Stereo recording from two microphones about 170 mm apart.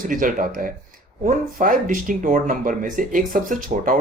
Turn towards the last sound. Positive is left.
turn(degrees=-55)  # may be behind; listen again after turning